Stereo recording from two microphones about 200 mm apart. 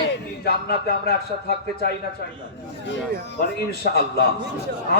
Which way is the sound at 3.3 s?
50° left (ahead or behind).